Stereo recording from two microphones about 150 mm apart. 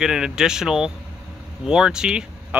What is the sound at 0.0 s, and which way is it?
Speech, 5° right (ahead or behind).